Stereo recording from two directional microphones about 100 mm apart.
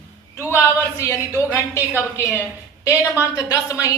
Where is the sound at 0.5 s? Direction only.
25° left (ahead or behind).